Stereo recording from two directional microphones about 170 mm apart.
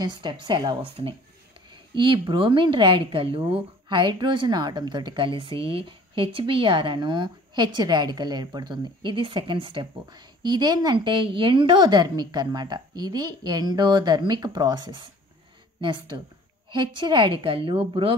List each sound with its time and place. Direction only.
0.0 s a woman's voice: 25° right (ahead or behind)